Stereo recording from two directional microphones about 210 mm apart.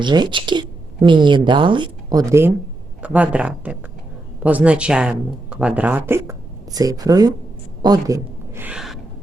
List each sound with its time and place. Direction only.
0.0 s a woman's voice: 20° right (ahead or behind); by 9.0 s 5° right (ahead or behind)